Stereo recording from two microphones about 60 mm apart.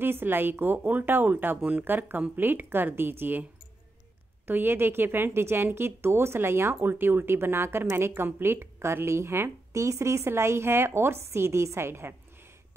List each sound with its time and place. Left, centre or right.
0.0 s speech: right
4.5 s a woman's voice: right
9.7 s a woman's voice: right